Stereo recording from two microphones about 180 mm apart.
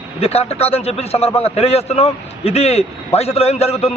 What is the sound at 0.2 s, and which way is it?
A man's voice, 35° left (ahead or behind).